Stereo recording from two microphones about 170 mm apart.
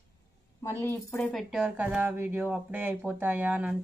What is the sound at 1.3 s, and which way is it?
A woman's voice, 5° right (ahead or behind).